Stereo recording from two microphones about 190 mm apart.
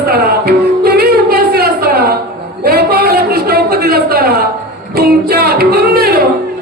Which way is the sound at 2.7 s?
55° right (ahead or behind).